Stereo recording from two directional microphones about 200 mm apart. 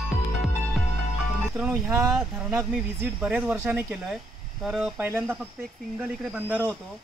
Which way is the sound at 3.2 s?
5° right (ahead or behind).